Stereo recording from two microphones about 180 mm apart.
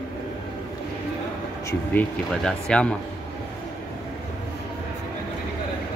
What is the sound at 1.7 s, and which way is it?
Speech, 10° left (ahead or behind).